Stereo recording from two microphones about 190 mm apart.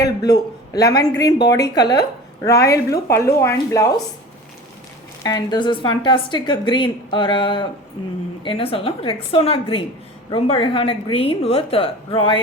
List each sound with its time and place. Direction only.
0.0 s a woman's voice: 20° left (ahead or behind)
5.2 s speech: 20° left (ahead or behind)